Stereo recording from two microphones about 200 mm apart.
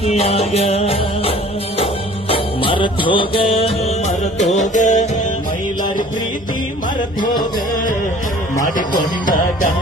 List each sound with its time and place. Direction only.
0.0 s music: 30° left (ahead or behind)
9.2 s music: 40° left (ahead or behind)